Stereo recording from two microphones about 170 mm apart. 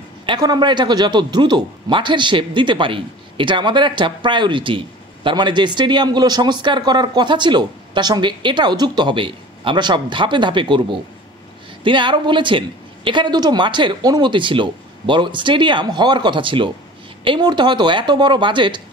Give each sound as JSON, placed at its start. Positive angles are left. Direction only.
{"t": 0.3, "sound": "a man's voice", "side_deg": -25}